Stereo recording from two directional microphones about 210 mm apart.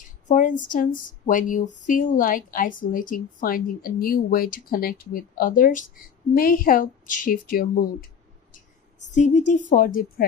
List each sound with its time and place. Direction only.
0.3 s a woman's voice: 35° left (ahead or behind)
9.1 s a woman's voice: 35° left (ahead or behind)